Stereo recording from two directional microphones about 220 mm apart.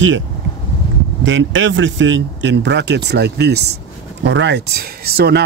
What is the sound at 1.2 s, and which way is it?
Speech, 55° right (ahead or behind).